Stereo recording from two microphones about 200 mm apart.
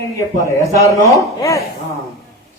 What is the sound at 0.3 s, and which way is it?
A man's voice, 15° left (ahead or behind).